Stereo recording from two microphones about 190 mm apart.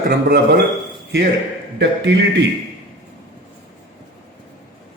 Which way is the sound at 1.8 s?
65° right (ahead or behind).